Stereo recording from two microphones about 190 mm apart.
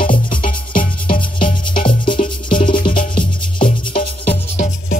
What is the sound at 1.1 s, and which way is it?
Music, 30° left (ahead or behind).